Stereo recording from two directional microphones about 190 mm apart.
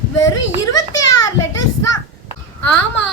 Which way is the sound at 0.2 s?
15° left (ahead or behind).